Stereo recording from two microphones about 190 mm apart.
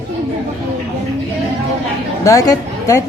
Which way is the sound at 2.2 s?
15° left (ahead or behind).